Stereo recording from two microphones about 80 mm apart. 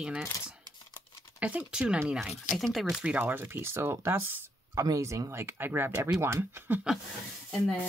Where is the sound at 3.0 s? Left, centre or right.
Centre.